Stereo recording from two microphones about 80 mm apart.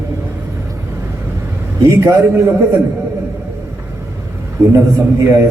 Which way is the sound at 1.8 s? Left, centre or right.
Right.